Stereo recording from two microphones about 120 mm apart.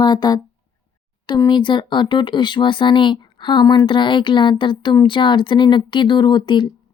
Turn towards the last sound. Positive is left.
turn(degrees=40)  # may be behind; listen again after turning